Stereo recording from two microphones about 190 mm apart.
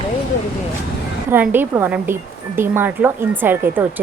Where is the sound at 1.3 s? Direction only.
10° right (ahead or behind).